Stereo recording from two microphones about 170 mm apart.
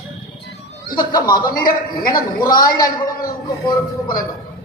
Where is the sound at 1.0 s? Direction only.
25° left (ahead or behind).